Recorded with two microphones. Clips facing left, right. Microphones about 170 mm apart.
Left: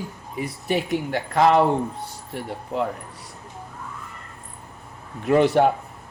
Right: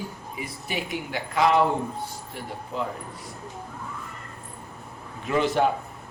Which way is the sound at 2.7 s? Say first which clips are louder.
Left 5 dB; 65° left (ahead or behind).